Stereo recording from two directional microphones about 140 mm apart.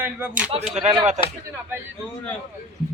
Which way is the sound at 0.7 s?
50° right (ahead or behind).